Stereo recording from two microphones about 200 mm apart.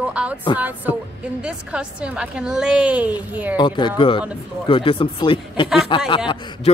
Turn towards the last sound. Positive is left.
turn(degrees=25)  # may be behind; listen again after turning